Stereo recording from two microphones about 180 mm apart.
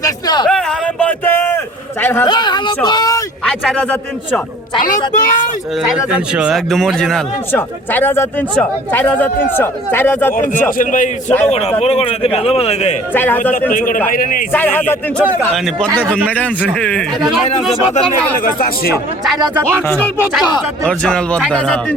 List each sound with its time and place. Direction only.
0.0 s a sound: 20° left (ahead or behind)
0.4 s a sound: 5° left (ahead or behind)
2.2 s speech: 25° left (ahead or behind)
3.4 s a man's voice: 5° left (ahead or behind)
4.8 s a man's voice: 45° left (ahead or behind)
6.1 s a man's voice: 5° right (ahead or behind); by 10.3 s 10° left (ahead or behind)
10.3 s a man's voice: 50° left (ahead or behind)
11.4 s a man's voice: 35° left (ahead or behind)
13.1 s a man's voice: 10° left (ahead or behind)
13.7 s a man's voice: 50° left (ahead or behind)
14.5 s a man's voice: 10° left (ahead or behind)
15.2 s a man's voice: 5° right (ahead or behind)
19.9 s a man's voice: 10° left (ahead or behind)